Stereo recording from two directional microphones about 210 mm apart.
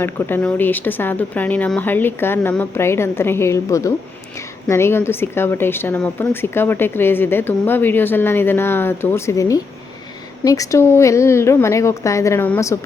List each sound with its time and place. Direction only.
0.0 s speech: 10° left (ahead or behind)